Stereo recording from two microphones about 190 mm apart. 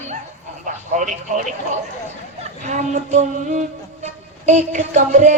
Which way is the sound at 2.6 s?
40° right (ahead or behind).